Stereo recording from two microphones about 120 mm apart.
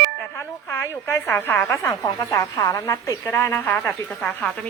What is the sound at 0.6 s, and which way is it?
A woman's voice, 20° left (ahead or behind).